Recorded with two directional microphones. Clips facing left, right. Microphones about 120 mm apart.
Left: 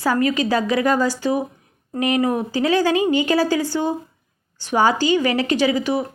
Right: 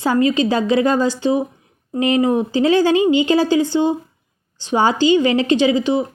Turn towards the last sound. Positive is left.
turn(degrees=-25)  # may be behind; listen again after turning